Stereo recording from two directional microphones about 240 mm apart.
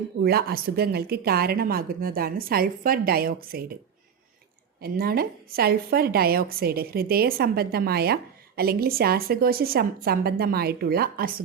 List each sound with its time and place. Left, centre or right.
0.2 s a woman's voice: right
4.8 s a woman's voice: right